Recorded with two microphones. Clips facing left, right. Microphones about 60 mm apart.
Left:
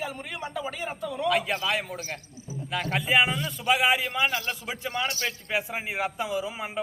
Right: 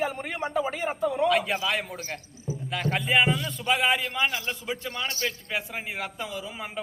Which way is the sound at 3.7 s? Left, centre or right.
Centre.